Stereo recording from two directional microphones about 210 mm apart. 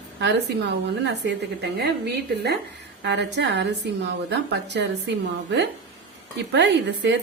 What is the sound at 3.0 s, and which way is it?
A woman's voice, 55° right (ahead or behind).